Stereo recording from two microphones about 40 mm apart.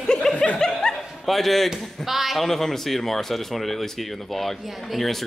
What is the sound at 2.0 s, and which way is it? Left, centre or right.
Speech, centre.